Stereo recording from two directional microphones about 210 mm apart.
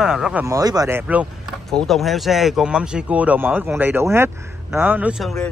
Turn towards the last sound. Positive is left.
turn(degrees=0)  # may be behind; listen again after turning